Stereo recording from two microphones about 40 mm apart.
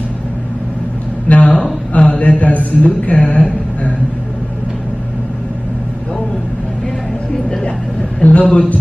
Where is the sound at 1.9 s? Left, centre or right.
Left.